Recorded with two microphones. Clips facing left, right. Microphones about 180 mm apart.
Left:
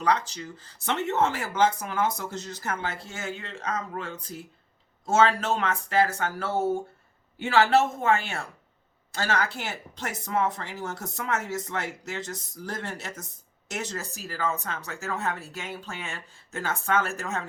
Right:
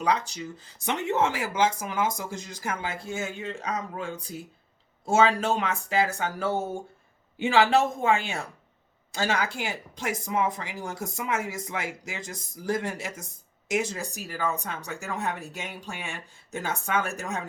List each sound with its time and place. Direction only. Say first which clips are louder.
0.0 s speech: left 1 dB; 10° right (ahead or behind)